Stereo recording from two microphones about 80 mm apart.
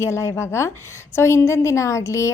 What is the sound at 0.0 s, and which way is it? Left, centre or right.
A woman's voice, left.